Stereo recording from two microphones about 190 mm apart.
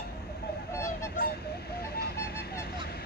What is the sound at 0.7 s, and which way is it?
Goose, 15° left (ahead or behind).